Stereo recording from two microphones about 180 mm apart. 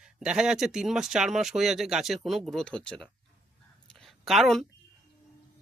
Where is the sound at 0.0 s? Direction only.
5° right (ahead or behind).